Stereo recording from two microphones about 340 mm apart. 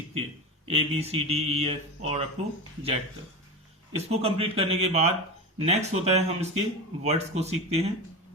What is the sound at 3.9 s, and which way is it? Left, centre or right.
A man's voice, centre.